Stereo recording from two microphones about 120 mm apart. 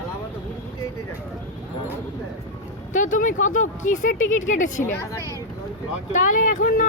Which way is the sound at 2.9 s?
90° left.